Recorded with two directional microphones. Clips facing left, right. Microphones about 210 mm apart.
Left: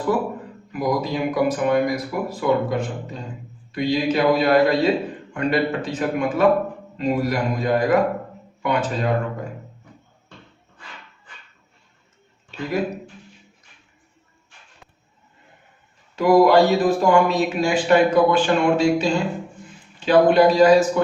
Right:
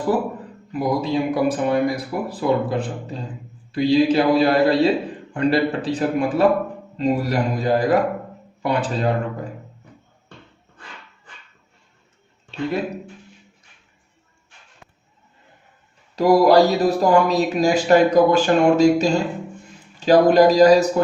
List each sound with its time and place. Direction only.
0.7 s speech: 30° right (ahead or behind)
12.5 s speech: 30° right (ahead or behind)
16.1 s speech: 35° right (ahead or behind)